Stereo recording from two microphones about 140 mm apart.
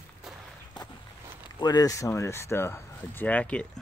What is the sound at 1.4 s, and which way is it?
Speech, 30° left (ahead or behind).